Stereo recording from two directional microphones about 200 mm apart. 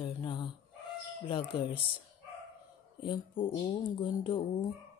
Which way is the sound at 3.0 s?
20° left (ahead or behind).